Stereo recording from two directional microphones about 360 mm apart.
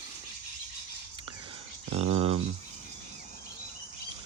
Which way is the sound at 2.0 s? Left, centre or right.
Centre.